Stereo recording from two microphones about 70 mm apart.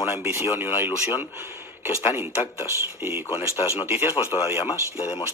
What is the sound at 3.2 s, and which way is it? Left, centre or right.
Speech, left.